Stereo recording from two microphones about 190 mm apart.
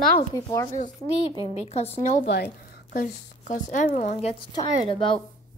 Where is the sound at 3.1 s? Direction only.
40° left (ahead or behind).